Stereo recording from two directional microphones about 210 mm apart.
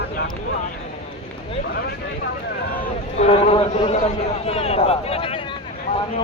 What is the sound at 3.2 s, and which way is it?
A man's voice, 30° left (ahead or behind).